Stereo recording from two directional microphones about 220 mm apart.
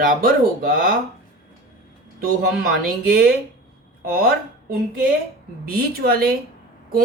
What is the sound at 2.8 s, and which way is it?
Speech, 45° right (ahead or behind).